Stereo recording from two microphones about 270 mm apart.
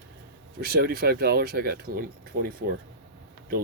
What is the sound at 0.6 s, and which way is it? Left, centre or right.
Speech, right.